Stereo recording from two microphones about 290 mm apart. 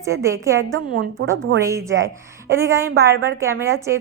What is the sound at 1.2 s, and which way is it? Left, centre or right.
Speech, right.